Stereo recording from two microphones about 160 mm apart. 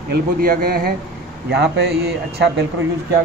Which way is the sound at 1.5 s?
90° right.